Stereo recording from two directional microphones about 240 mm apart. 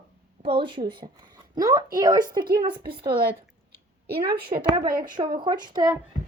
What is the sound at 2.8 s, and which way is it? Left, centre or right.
Speech, right.